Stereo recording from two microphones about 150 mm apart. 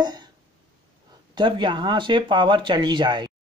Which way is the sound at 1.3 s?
30° right (ahead or behind).